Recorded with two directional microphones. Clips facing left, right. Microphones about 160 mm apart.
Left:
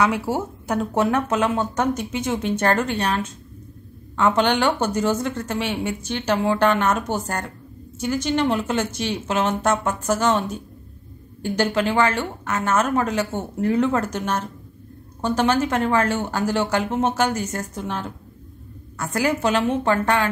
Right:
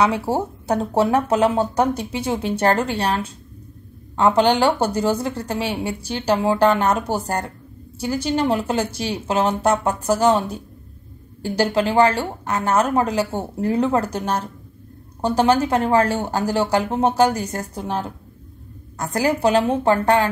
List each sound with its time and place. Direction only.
0.3 s a woman's voice: 35° right (ahead or behind)
4.4 s a woman's voice: 35° right (ahead or behind)
11.4 s a woman's voice: 35° right (ahead or behind)
19.1 s a woman's voice: 35° right (ahead or behind)